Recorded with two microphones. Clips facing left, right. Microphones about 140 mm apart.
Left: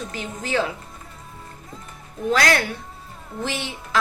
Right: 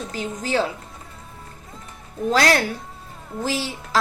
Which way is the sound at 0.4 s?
35° right (ahead or behind).